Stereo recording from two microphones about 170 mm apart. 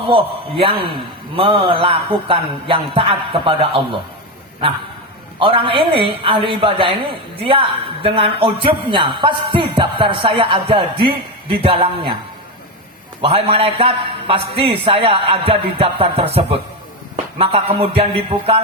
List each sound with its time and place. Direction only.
0.1 s speech: 30° right (ahead or behind)
5.4 s speech: 30° right (ahead or behind)
13.2 s speech: 35° right (ahead or behind)